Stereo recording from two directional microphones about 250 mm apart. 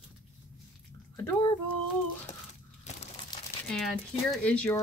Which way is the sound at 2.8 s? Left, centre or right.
Left.